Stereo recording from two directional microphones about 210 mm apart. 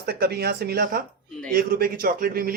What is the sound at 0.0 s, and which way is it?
Speech, 50° right (ahead or behind).